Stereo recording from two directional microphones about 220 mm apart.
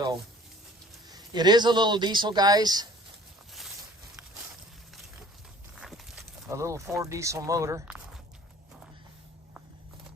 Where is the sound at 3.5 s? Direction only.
Centre (ahead or behind).